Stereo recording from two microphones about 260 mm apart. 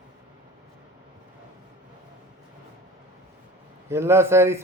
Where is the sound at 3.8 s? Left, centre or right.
Centre.